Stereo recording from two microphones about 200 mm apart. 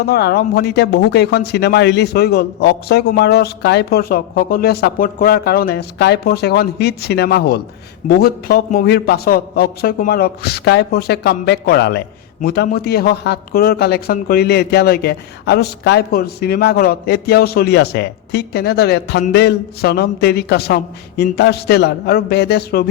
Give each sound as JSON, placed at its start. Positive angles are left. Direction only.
{"t": 0.0, "sound": "a man's voice", "side_deg": 55}